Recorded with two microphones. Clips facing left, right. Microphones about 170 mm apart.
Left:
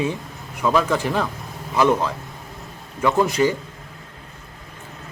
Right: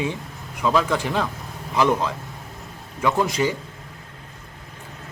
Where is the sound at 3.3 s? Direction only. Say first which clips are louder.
Left 4 dB; 10° right (ahead or behind).